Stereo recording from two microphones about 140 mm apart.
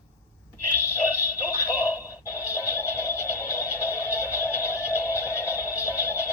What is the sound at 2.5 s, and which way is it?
Music, 20° left (ahead or behind).